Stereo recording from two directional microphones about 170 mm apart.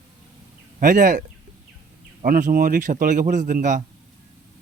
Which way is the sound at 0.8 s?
50° right (ahead or behind).